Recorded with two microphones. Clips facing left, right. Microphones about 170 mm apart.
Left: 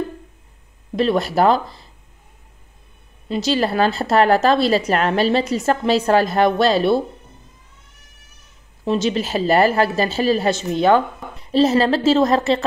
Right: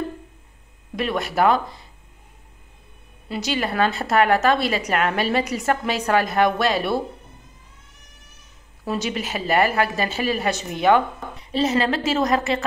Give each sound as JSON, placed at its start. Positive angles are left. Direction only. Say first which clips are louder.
{"t": 0.9, "sound": "speech", "louder": "left 5 dB", "side_deg": 30}
{"t": 3.3, "sound": "a woman's voice", "louder": "left 6 dB", "side_deg": 25}
{"t": 8.8, "sound": "speech", "louder": "left 6 dB", "side_deg": 25}